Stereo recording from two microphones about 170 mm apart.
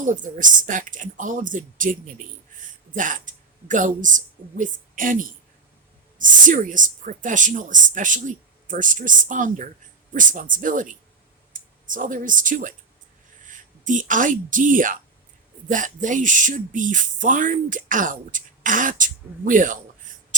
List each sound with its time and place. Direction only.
0.0 s speech: 50° right (ahead or behind)